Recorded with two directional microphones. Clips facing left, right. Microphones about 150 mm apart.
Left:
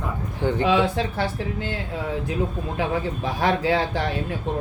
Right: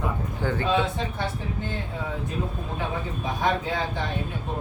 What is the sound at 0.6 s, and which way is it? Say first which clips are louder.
A woman's voice: left 5 dB; 90° left.